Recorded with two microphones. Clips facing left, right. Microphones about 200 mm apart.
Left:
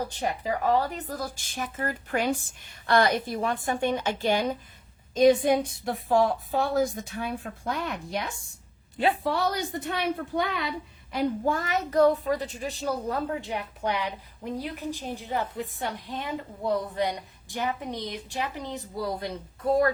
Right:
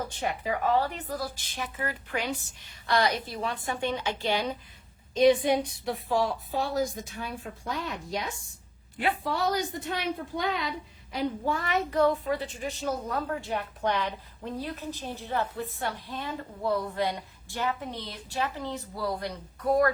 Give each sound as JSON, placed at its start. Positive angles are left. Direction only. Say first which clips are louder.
{"t": 0.8, "sound": "a woman's voice", "louder": "even", "side_deg": 40}
{"t": 9.3, "sound": "a woman's voice", "louder": "left 1 dB", "side_deg": 60}
{"t": 11.1, "sound": "a woman's voice", "louder": "left 3 dB", "side_deg": 45}
{"t": 13.4, "sound": "a woman's voice", "louder": "right 1 dB", "side_deg": 15}